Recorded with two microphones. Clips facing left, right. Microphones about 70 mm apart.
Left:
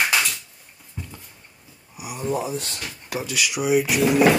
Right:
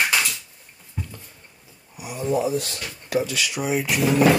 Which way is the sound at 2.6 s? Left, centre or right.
Left.